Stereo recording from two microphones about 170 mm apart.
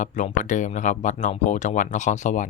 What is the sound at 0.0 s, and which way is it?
Speech, 45° left (ahead or behind).